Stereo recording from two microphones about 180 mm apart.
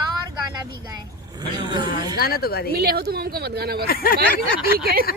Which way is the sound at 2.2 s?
60° left (ahead or behind).